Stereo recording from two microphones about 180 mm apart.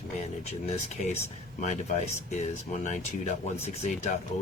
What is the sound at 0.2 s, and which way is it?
Speech, 40° left (ahead or behind).